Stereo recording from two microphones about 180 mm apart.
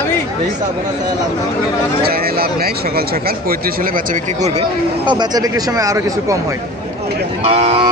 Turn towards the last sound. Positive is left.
turn(degrees=-35)  # may be behind; listen again after turning